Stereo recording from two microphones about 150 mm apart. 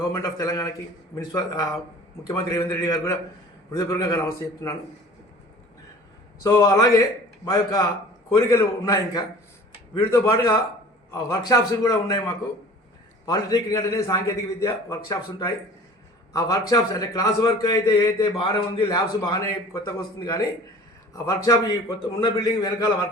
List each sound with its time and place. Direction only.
0.0 s a man's voice: 20° left (ahead or behind)
6.4 s a man's voice: 20° left (ahead or behind)
13.2 s a man's voice: 25° left (ahead or behind)